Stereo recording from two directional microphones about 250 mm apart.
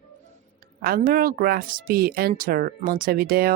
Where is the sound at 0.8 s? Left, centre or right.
Right.